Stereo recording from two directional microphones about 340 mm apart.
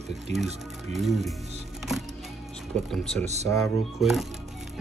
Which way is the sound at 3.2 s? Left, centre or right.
Centre.